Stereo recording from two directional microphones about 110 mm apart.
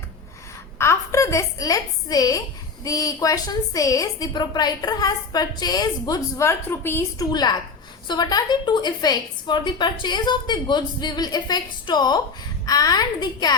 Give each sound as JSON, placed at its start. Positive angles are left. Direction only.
{"t": 0.8, "sound": "a woman's voice", "side_deg": 25}
{"t": 7.3, "sound": "a woman's voice", "side_deg": 40}